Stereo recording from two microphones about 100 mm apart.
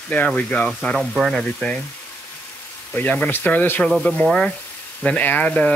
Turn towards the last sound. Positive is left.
turn(degrees=10)  # may be behind; listen again after turning